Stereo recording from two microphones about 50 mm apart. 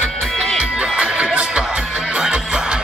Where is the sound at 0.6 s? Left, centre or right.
Centre.